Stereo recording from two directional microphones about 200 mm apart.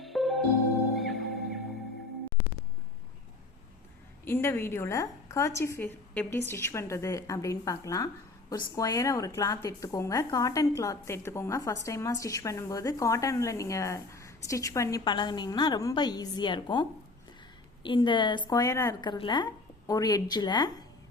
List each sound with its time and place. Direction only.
0.0 s music: centre (ahead or behind)
4.3 s a woman's voice: 10° left (ahead or behind)
17.8 s a woman's voice: 25° left (ahead or behind)